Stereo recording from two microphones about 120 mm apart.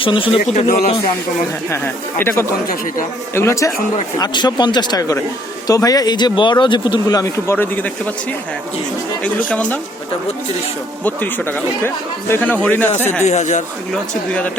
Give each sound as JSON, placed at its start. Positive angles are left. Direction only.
{"t": 0.0, "sound": "speech", "side_deg": 45}
{"t": 0.5, "sound": "speech", "side_deg": 70}
{"t": 1.7, "sound": "speech", "side_deg": 20}
{"t": 4.2, "sound": "speech", "side_deg": 35}
{"t": 9.2, "sound": "speech", "side_deg": 10}
{"t": 11.0, "sound": "speech", "side_deg": 15}
{"t": 13.2, "sound": "speech", "side_deg": 80}